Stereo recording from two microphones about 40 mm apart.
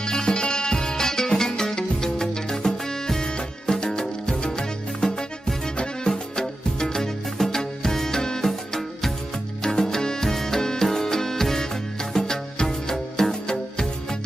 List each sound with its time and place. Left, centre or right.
0.0 s music: centre